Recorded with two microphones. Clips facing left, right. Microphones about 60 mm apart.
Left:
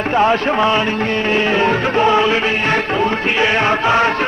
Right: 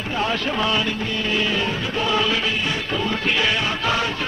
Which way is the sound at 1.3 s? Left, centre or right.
Left.